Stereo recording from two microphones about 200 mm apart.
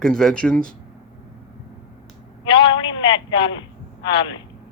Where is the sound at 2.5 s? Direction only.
25° left (ahead or behind).